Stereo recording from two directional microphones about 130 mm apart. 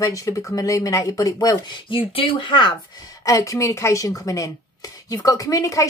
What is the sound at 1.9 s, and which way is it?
Speech, 40° left (ahead or behind).